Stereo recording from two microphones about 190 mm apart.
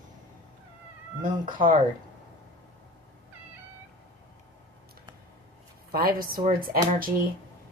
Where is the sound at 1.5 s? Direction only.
45° right (ahead or behind).